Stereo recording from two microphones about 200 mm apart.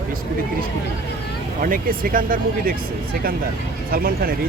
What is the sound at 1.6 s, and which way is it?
Speech, 45° right (ahead or behind).